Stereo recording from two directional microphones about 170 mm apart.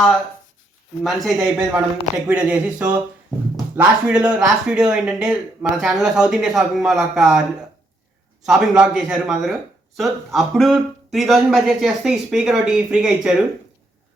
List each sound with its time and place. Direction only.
1.0 s speech: centre (ahead or behind)
8.4 s speech: 5° right (ahead or behind)